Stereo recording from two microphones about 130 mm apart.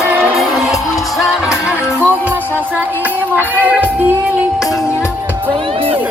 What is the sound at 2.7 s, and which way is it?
Child singing, 15° right (ahead or behind).